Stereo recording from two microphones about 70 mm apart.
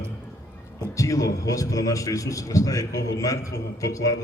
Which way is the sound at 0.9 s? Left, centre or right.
Left.